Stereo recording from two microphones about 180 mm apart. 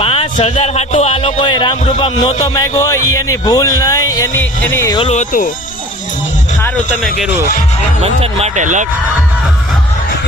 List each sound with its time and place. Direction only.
0.0 s speech: 30° left (ahead or behind); by 4.9 s 15° left (ahead or behind)
4.9 s speech: 40° left (ahead or behind)
8.0 s speech: 35° right (ahead or behind)